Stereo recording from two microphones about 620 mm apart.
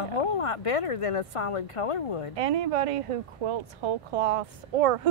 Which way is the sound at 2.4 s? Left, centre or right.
Right.